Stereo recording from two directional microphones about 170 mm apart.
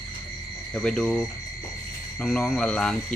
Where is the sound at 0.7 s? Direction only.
5° left (ahead or behind).